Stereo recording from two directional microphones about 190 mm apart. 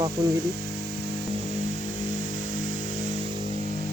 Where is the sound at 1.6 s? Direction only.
40° right (ahead or behind).